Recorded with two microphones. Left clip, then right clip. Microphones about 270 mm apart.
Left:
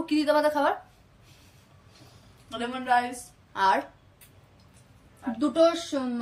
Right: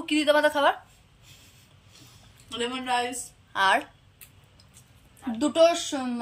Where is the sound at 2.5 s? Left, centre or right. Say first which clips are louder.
Left 2 dB; centre.